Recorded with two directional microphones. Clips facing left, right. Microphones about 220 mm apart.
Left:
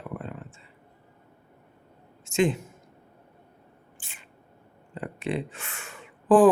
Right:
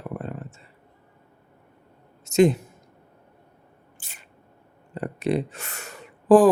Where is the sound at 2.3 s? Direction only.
40° right (ahead or behind).